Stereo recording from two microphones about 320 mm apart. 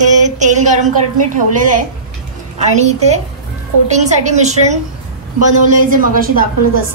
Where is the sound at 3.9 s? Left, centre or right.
Right.